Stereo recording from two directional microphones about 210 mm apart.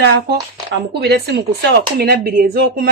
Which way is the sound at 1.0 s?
50° right (ahead or behind).